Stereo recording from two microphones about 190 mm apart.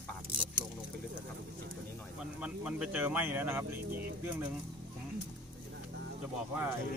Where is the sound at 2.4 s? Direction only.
5° right (ahead or behind).